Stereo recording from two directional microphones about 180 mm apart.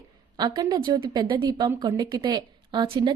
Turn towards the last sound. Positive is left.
turn(degrees=-25)  # may be behind; listen again after turning